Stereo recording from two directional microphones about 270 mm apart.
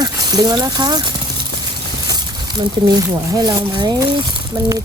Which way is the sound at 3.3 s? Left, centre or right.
Centre.